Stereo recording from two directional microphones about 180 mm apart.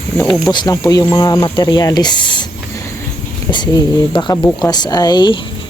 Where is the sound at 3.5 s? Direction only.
25° left (ahead or behind).